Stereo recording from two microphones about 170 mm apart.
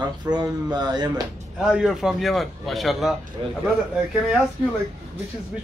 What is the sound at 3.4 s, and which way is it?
Speech, 30° right (ahead or behind).